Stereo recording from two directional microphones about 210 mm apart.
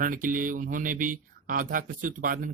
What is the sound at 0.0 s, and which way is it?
Speech, 40° right (ahead or behind).